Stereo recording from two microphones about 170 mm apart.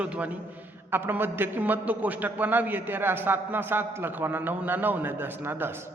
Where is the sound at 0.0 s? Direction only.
10° right (ahead or behind).